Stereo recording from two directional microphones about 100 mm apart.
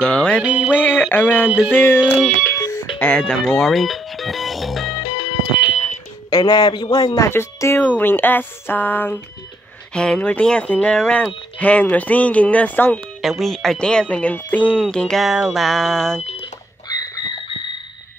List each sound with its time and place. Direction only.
0.0 s speech: 10° left (ahead or behind)
0.4 s music: 10° right (ahead or behind)
0.7 s speech: 15° left (ahead or behind)
1.5 s music: 10° right (ahead or behind)
2.5 s telephone: 30° left (ahead or behind)
3.0 s music: 10° left (ahead or behind)
4.9 s music: 60° left (ahead or behind)
6.3 s a man's voice: 40° left (ahead or behind)
7.2 s speech: 25° left (ahead or behind)
13.2 s speech: centre (ahead or behind)
16.2 s smoke detector: 90° left
16.8 s squawk: 40° left (ahead or behind)